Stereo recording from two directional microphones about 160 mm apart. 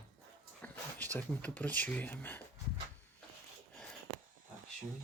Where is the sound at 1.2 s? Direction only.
10° left (ahead or behind).